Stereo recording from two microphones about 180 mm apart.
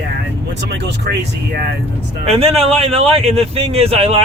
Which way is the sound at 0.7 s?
75° right (ahead or behind).